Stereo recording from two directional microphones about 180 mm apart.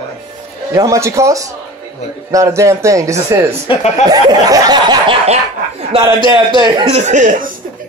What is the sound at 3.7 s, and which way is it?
Speech, 30° left (ahead or behind).